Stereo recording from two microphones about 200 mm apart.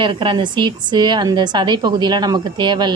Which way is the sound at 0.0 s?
25° right (ahead or behind).